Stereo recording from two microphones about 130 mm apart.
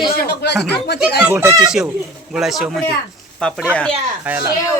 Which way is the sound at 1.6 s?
5° right (ahead or behind).